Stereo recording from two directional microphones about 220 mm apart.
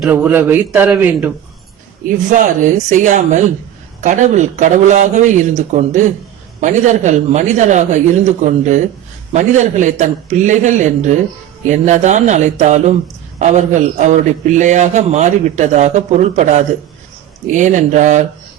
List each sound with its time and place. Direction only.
0.0 s speech: 10° right (ahead or behind)
2.0 s a man's voice: 35° right (ahead or behind)